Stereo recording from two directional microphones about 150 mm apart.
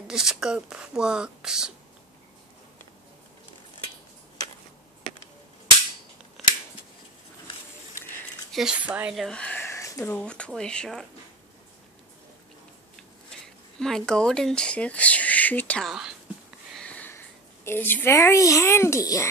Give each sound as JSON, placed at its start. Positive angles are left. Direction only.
{"t": 0.1, "sound": "speech", "side_deg": -5}
{"t": 8.5, "sound": "speech", "side_deg": -5}
{"t": 13.3, "sound": "speech", "side_deg": 5}
{"t": 16.7, "sound": "sniff", "side_deg": 10}
{"t": 17.6, "sound": "a child's voice", "side_deg": 15}